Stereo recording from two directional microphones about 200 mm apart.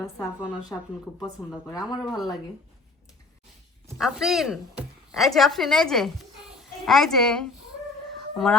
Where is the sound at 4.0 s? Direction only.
Centre (ahead or behind).